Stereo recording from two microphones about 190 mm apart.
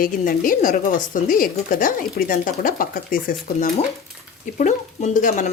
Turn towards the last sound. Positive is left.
turn(degrees=40)  # may be behind; listen again after turning